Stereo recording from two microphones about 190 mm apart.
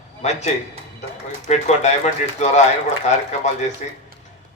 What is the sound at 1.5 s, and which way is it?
Speech, 35° left (ahead or behind).